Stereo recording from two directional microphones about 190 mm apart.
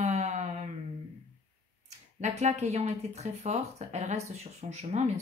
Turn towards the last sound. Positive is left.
turn(degrees=-35)  # may be behind; listen again after turning